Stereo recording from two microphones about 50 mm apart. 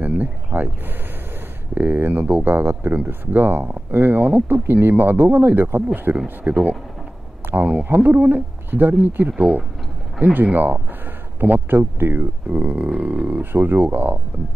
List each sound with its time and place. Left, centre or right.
0.0 s a sound: right
1.8 s speech: right
7.8 s speech: right
13.4 s speech: right